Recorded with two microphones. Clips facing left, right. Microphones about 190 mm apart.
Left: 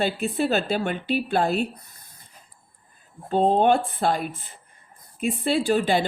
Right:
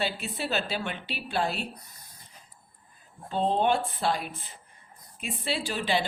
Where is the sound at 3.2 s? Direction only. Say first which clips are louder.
Left 6 dB; 45° left (ahead or behind).